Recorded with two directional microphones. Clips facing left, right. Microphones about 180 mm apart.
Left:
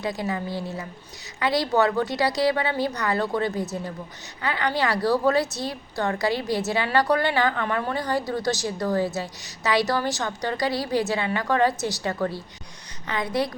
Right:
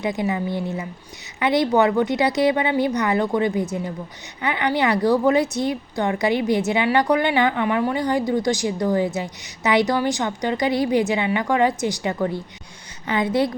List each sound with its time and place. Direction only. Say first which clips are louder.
0.0 s a woman's voice: right 5 dB; 20° right (ahead or behind)